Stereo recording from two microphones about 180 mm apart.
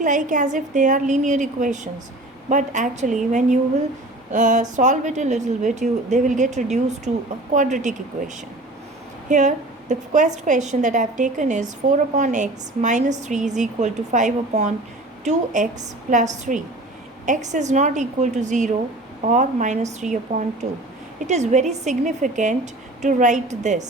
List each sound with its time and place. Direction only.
0.0 s a woman's voice: 45° right (ahead or behind)
4.3 s a woman's voice: 45° right (ahead or behind)
9.3 s a woman's voice: 45° right (ahead or behind)